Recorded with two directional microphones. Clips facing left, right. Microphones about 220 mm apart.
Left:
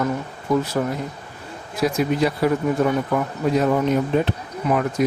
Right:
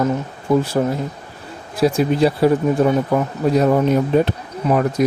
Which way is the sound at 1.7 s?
30° right (ahead or behind).